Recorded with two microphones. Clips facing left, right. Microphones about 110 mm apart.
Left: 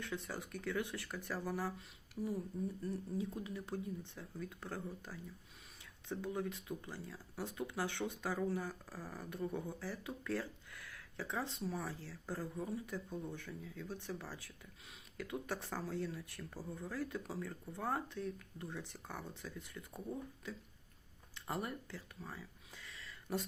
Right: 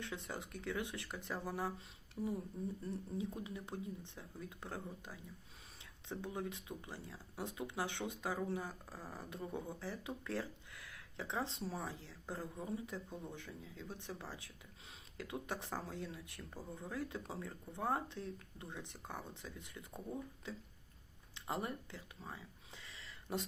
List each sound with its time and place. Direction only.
0.0 s speech: 20° right (ahead or behind)
2.2 s speech: centre (ahead or behind)
2.8 s speech: 20° right (ahead or behind)
21.3 s a sound: 20° right (ahead or behind)